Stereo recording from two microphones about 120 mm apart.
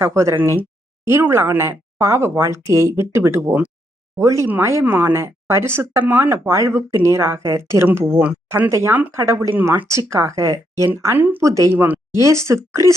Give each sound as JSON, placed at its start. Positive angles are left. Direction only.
{"t": 0.0, "sound": "speech", "side_deg": -25}